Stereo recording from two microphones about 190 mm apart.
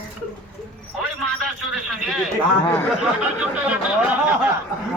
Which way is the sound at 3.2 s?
5° right (ahead or behind).